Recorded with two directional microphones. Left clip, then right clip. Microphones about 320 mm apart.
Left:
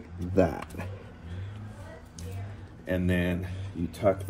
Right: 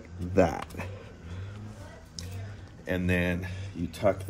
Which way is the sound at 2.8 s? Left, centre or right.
Right.